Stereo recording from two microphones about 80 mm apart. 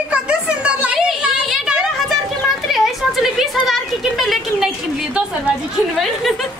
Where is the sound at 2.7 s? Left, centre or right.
Centre.